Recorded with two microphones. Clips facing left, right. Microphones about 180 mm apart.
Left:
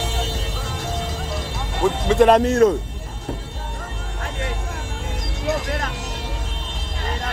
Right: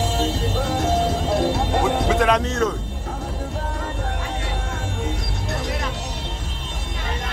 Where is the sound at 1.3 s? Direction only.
60° right (ahead or behind).